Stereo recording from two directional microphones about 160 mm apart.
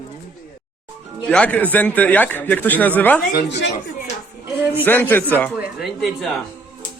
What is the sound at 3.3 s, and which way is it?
Speech, 90° left.